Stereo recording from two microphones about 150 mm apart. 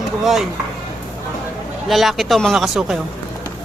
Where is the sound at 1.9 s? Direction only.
Centre (ahead or behind).